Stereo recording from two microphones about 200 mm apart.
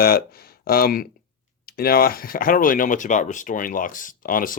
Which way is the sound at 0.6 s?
50° left (ahead or behind).